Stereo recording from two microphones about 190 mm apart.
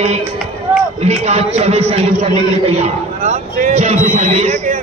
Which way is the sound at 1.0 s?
35° right (ahead or behind).